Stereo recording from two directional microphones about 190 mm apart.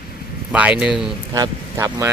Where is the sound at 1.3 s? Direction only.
20° right (ahead or behind).